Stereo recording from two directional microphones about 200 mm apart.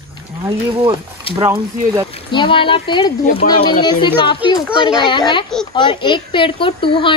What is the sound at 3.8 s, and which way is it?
Speech, 25° left (ahead or behind).